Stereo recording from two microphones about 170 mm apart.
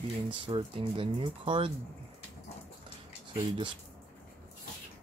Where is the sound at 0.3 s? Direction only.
30° right (ahead or behind).